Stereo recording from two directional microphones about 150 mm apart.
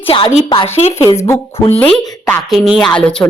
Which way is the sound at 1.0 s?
20° left (ahead or behind).